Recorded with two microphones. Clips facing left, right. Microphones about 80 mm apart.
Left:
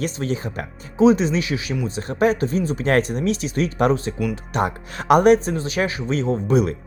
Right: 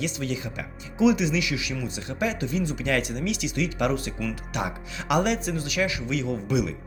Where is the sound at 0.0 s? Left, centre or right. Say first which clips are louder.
Left 5 dB; left.